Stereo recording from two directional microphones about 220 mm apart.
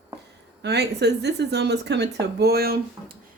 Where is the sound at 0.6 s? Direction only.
50° right (ahead or behind).